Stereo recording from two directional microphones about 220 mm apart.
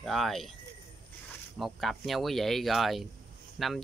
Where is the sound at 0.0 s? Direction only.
Centre (ahead or behind).